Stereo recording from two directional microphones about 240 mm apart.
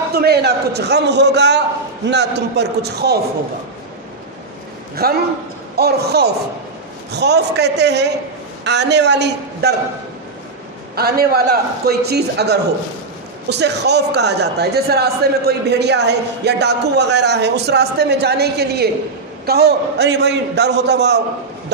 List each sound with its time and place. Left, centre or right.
0.1 s speech: right
5.0 s a man's voice: right
11.0 s a man's voice: right